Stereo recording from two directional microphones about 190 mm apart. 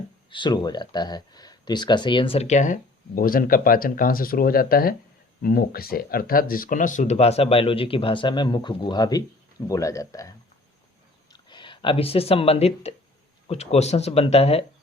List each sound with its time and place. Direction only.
0.3 s speech: 25° left (ahead or behind)
3.2 s speech: 50° left (ahead or behind); by 14.6 s 30° left (ahead or behind)